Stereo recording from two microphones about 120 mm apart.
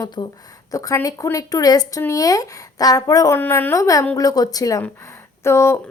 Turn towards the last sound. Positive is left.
turn(degrees=20)  # may be behind; listen again after turning